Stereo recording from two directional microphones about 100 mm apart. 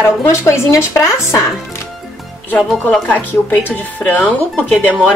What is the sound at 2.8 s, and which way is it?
Speech, 15° left (ahead or behind).